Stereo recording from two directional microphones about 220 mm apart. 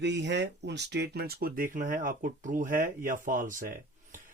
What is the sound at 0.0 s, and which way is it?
Speech, 50° right (ahead or behind).